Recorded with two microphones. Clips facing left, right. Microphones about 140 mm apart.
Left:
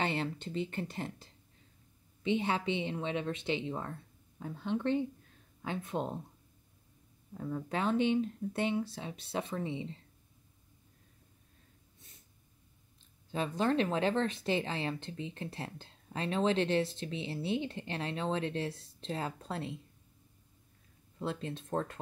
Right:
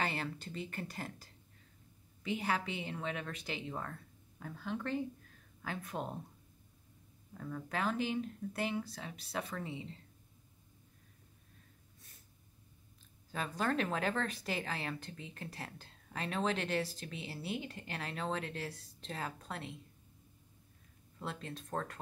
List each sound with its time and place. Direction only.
0.0 s speech: 25° left (ahead or behind)
7.3 s speech: 30° left (ahead or behind)
13.3 s speech: 25° left (ahead or behind)
21.2 s speech: 30° left (ahead or behind)